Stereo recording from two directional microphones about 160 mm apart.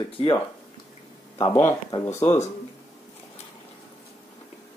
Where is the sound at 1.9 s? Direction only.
15° left (ahead or behind).